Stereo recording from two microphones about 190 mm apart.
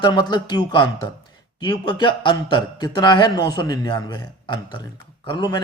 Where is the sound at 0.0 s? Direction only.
20° left (ahead or behind).